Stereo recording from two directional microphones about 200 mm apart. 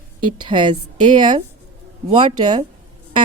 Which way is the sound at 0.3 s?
25° right (ahead or behind).